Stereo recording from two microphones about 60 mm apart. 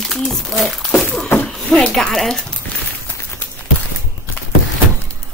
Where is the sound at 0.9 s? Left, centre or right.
Centre.